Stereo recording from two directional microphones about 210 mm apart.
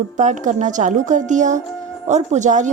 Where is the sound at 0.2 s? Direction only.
35° right (ahead or behind).